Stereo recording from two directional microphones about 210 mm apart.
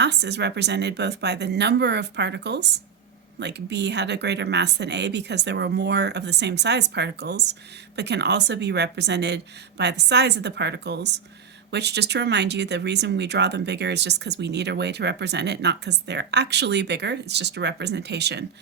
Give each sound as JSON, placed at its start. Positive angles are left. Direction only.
{"t": 0.0, "sound": "speech", "side_deg": -55}